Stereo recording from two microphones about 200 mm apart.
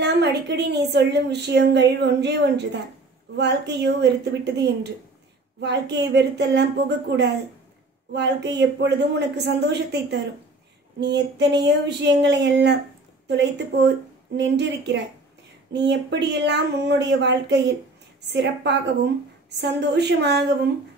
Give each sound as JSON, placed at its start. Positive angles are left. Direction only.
{"t": 0.0, "sound": "a woman's voice", "side_deg": -60}
{"t": 8.1, "sound": "a woman's voice", "side_deg": -60}